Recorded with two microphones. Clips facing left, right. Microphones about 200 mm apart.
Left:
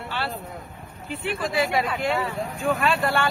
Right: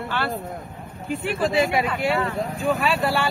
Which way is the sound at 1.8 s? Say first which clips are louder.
Right 2 dB; centre (ahead or behind).